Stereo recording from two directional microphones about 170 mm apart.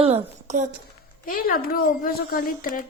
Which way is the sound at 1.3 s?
55° left (ahead or behind).